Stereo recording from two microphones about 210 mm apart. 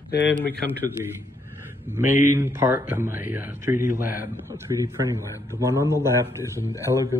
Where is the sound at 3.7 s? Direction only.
40° left (ahead or behind).